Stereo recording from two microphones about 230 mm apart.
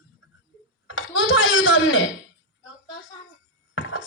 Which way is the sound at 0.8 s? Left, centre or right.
Left.